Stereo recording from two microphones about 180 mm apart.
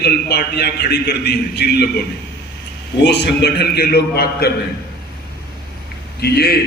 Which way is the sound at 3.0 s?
65° left (ahead or behind).